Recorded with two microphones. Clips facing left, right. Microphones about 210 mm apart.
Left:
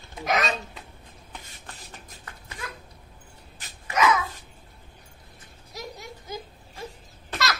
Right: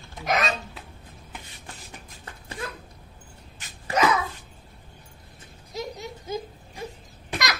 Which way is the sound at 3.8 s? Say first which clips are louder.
Even; 35° right (ahead or behind).